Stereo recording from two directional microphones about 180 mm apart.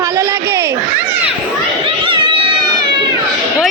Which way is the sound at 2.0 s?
25° right (ahead or behind).